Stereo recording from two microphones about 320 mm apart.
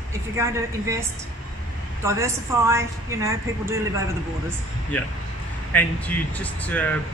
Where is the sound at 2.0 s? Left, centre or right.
Centre.